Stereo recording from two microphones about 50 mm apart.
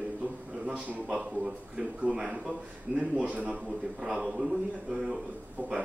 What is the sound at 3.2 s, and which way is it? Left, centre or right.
Speech, right.